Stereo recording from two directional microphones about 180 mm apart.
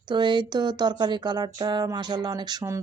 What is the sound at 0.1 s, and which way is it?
Speech, 25° right (ahead or behind).